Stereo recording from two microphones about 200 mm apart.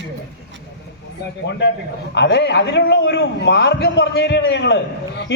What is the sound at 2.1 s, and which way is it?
A man's voice, 60° left (ahead or behind).